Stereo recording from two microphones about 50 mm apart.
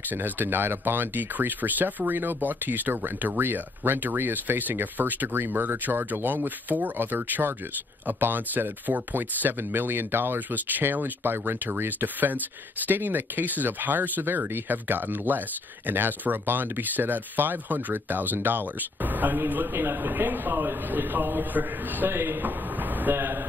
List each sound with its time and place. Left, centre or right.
0.1 s speech: right
19.5 s speech: right
23.1 s a sound: right